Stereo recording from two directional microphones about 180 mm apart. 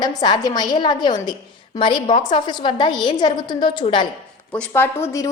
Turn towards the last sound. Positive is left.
turn(degrees=15)  # may be behind; listen again after turning